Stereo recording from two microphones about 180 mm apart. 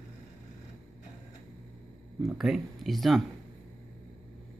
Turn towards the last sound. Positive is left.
turn(degrees=0)  # may be behind; listen again after turning